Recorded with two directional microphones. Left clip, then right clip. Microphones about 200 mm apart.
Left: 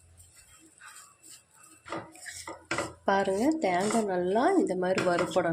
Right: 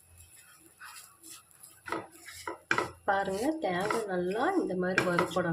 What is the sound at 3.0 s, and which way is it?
Speech, 30° left (ahead or behind).